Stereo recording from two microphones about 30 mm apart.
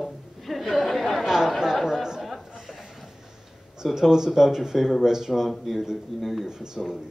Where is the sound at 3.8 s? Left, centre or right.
Centre.